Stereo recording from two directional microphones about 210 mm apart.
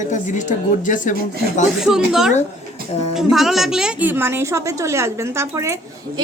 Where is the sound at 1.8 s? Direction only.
Centre (ahead or behind).